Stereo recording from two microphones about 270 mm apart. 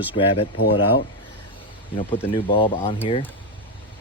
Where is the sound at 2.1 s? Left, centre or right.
Centre.